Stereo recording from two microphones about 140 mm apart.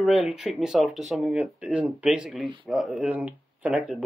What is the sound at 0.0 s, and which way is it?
Speech, 5° right (ahead or behind).